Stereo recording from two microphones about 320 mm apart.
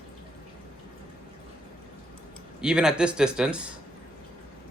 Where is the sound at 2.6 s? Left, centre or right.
Centre.